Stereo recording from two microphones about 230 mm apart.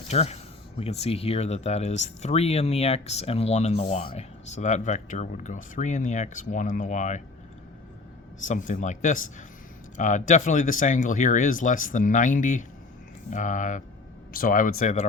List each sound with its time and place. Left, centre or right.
0.1 s speech: left
8.4 s speech: left